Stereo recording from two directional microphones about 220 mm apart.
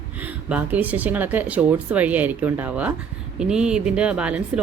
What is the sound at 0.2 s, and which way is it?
A woman's voice, 5° right (ahead or behind).